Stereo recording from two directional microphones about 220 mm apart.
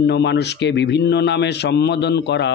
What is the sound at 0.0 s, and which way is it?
A man's voice, 50° left (ahead or behind).